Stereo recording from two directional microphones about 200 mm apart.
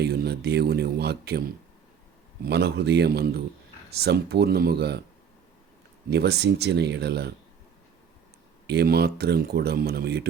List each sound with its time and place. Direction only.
0.0 s speech: 55° right (ahead or behind)
6.1 s speech: 55° right (ahead or behind)
8.6 s speech: 55° right (ahead or behind)